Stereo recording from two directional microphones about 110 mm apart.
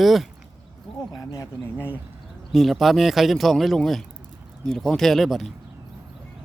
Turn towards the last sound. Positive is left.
turn(degrees=0)  # may be behind; listen again after turning